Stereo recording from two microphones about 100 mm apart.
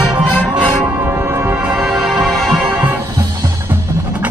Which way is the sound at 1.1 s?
25° right (ahead or behind).